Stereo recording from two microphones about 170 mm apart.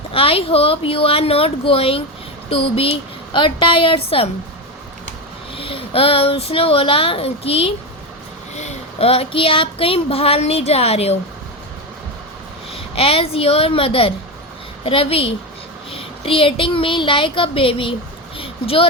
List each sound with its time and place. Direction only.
0.1 s speech: 35° left (ahead or behind)
5.5 s speech: 30° left (ahead or behind)
12.7 s speech: 35° left (ahead or behind)